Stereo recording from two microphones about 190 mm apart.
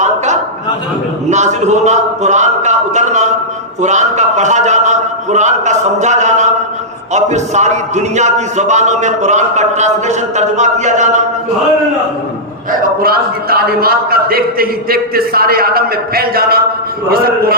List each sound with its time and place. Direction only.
1.3 s a man's voice: 40° right (ahead or behind)
12.7 s a man's voice: 50° right (ahead or behind)